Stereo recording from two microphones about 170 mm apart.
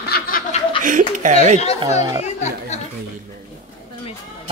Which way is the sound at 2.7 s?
40° left (ahead or behind).